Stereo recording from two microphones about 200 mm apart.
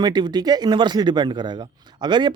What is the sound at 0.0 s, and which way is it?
Speech, 20° right (ahead or behind).